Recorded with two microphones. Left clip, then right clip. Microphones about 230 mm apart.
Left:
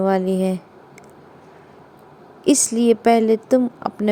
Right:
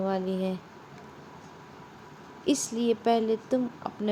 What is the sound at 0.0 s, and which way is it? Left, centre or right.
Speech, left.